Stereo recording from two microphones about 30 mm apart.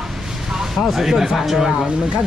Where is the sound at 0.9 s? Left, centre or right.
Centre.